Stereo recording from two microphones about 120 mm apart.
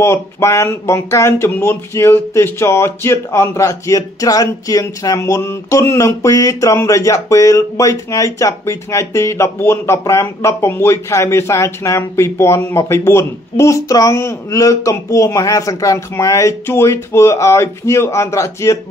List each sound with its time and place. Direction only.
0.0 s speech: 25° left (ahead or behind)